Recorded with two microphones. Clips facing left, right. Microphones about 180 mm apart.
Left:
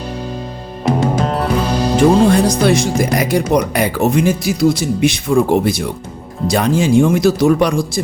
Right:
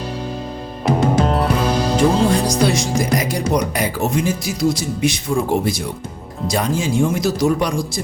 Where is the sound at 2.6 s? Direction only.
60° left (ahead or behind).